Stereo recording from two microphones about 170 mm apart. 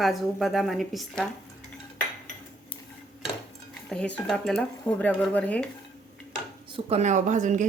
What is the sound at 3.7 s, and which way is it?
Speech, 5° left (ahead or behind).